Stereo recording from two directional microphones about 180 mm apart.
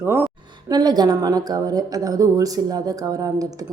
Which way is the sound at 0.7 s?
20° right (ahead or behind).